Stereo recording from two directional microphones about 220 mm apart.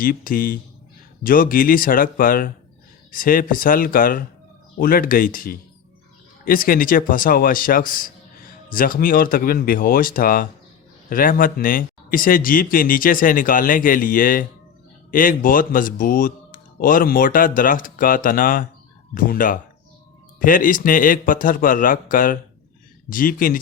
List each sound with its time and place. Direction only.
0.0 s speech: 40° left (ahead or behind)